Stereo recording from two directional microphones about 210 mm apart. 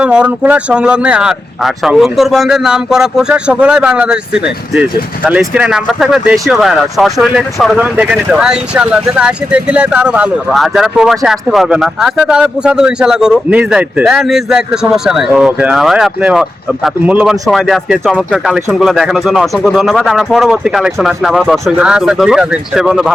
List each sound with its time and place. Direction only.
0.0 s speech: 5° right (ahead or behind)